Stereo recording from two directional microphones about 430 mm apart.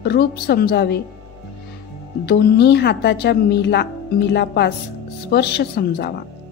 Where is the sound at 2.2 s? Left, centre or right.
Left.